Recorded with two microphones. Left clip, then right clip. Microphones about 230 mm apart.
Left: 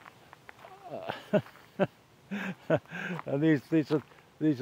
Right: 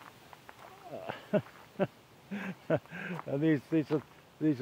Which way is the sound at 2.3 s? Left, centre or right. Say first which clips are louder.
Left 3 dB; centre.